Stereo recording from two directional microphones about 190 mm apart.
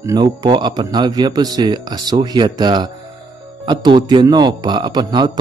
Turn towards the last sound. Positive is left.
turn(degrees=-20)  # may be behind; listen again after turning